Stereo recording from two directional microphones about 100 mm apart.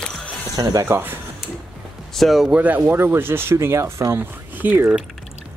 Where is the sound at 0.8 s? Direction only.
20° right (ahead or behind).